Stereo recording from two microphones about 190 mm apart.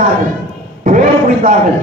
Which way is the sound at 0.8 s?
45° right (ahead or behind).